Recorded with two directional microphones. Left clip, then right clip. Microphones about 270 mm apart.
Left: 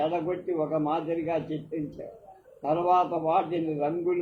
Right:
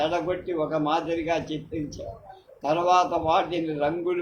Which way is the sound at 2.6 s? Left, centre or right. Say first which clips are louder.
Right 3 dB; right.